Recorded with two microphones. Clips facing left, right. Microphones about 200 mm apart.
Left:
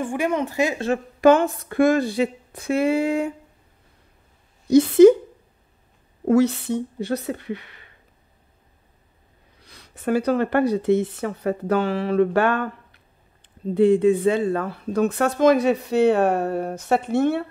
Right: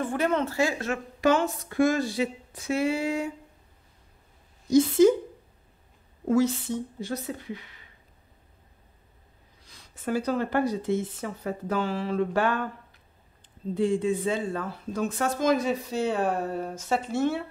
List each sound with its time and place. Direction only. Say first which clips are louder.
0.0 s speech: left 2 dB; 15° left (ahead or behind)
1.2 s speech: left 7 dB; 55° left (ahead or behind)
4.6 s speech: left 7 dB; 65° left (ahead or behind)
6.2 s speech: left 5 dB; 70° left (ahead or behind)
9.6 s speech: left 6 dB; 65° left (ahead or behind)